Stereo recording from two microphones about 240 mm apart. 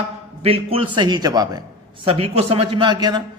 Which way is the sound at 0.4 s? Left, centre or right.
Right.